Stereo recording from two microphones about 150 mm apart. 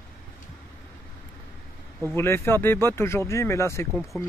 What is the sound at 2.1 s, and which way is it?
Speech, 15° left (ahead or behind).